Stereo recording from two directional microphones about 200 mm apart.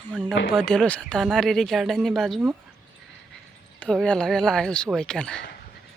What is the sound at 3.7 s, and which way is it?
Speech, 5° left (ahead or behind).